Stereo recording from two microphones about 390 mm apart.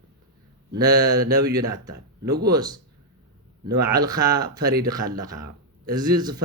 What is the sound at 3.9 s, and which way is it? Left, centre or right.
Speech, centre.